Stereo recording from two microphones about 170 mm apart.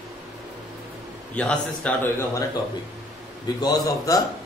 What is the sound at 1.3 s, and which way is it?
Speech, 10° left (ahead or behind).